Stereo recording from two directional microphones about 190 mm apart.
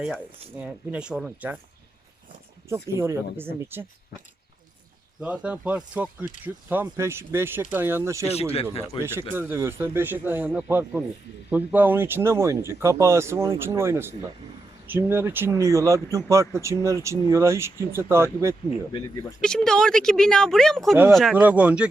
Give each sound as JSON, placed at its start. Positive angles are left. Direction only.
{"t": 0.6, "sound": "speech", "side_deg": -5}
{"t": 2.6, "sound": "speech", "side_deg": -15}
{"t": 5.2, "sound": "speech", "side_deg": -5}
{"t": 8.9, "sound": "speech", "side_deg": 30}
{"t": 9.3, "sound": "speech", "side_deg": -10}
{"t": 19.4, "sound": "speech", "side_deg": 5}